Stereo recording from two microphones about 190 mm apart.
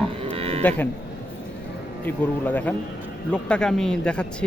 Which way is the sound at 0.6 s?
10° left (ahead or behind).